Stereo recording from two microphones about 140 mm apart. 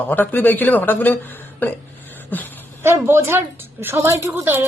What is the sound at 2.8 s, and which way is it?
Speech, 20° right (ahead or behind).